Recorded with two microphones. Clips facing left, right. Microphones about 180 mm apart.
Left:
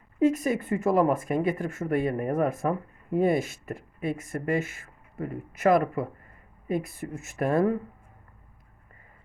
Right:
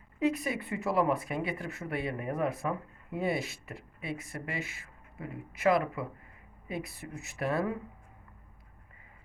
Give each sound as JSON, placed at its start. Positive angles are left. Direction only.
{"t": 0.2, "sound": "speech", "side_deg": 45}